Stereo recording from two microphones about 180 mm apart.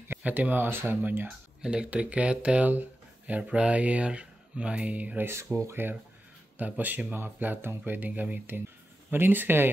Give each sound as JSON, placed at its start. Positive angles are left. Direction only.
{"t": 0.1, "sound": "speech", "side_deg": -10}